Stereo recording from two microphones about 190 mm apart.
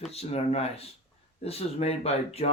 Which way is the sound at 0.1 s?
35° left (ahead or behind).